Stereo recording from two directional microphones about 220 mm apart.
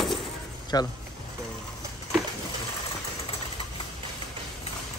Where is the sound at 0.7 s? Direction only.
15° left (ahead or behind).